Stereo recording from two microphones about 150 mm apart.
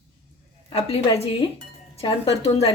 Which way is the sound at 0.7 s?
40° left (ahead or behind).